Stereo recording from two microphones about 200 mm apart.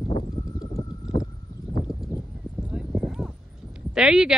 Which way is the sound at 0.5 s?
20° left (ahead or behind).